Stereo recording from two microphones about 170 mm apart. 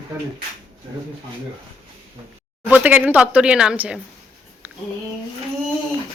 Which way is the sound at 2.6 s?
10° right (ahead or behind).